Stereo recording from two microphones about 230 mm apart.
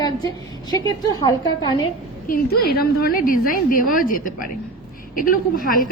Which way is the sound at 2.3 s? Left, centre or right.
Left.